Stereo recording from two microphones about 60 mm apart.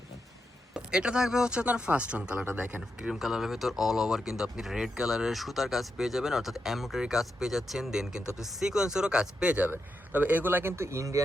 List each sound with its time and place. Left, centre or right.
0.7 s speech: centre
3.0 s speech: centre
10.1 s speech: right